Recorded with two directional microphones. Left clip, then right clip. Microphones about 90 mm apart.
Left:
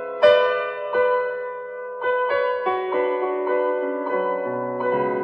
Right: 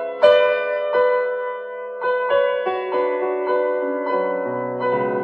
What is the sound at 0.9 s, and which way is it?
Music, 35° right (ahead or behind).